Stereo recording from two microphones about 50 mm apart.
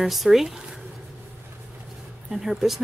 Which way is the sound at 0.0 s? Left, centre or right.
Centre.